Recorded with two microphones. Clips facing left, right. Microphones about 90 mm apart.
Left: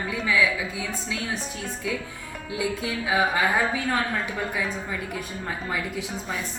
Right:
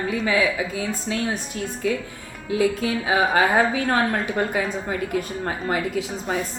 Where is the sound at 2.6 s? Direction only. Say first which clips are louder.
Right 6 dB; 65° right (ahead or behind).